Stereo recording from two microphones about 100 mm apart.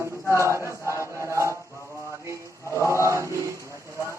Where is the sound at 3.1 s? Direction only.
30° right (ahead or behind).